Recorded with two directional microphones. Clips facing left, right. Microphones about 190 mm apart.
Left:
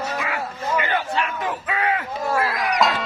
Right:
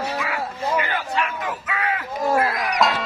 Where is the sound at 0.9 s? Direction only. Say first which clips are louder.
Left 1 dB; 30° left (ahead or behind).